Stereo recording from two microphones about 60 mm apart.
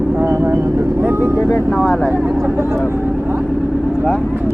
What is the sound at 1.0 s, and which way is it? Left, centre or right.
Speech, right.